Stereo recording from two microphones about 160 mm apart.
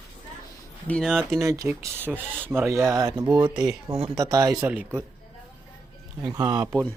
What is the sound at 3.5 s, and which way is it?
Speech, 5° right (ahead or behind).